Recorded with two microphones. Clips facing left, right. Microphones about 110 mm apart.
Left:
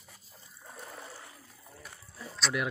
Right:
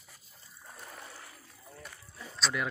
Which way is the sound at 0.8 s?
Centre (ahead or behind).